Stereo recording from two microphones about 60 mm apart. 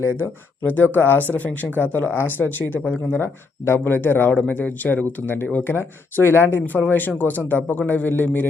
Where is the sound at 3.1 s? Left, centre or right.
Left.